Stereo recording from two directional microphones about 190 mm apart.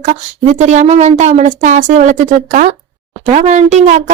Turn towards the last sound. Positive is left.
turn(degrees=-40)  # may be behind; listen again after turning